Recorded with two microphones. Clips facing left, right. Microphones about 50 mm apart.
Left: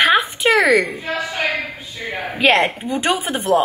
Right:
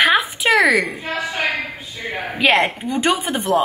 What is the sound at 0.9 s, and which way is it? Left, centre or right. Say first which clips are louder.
Speech: left 1 dB; right.